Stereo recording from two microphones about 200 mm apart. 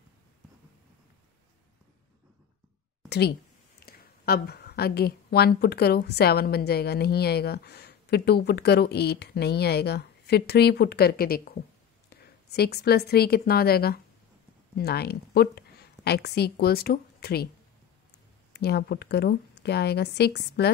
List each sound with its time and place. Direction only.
3.1 s a woman's voice: 55° left (ahead or behind)
18.5 s a woman's voice: 55° left (ahead or behind)